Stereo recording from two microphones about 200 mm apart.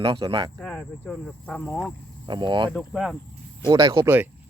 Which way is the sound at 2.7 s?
Centre (ahead or behind).